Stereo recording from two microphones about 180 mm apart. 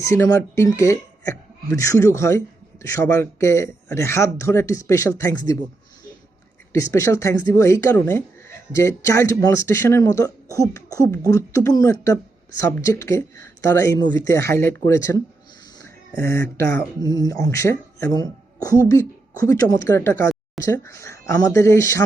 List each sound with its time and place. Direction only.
0.0 s speech: 15° left (ahead or behind)
6.7 s speech: 15° left (ahead or behind)